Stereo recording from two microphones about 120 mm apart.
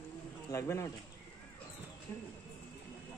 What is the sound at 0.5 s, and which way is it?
Speech, 25° left (ahead or behind).